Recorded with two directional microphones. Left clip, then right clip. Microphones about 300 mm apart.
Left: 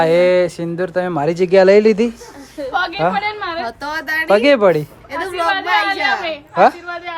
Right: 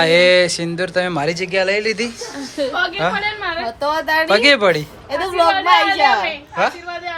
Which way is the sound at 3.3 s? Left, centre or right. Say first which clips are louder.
Even; left.